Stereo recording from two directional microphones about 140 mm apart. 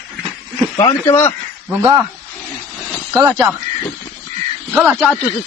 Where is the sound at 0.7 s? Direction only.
25° left (ahead or behind).